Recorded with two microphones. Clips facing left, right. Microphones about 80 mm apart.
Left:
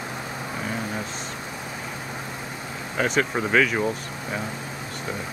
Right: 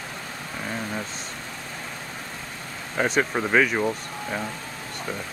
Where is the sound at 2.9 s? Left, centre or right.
Centre.